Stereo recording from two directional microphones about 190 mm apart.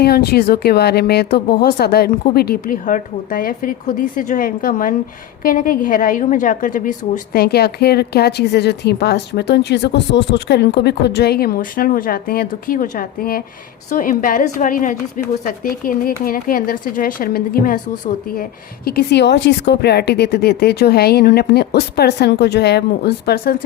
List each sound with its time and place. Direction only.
0.0 s a woman's voice: 55° left (ahead or behind)
18.9 s a woman's voice: 60° left (ahead or behind)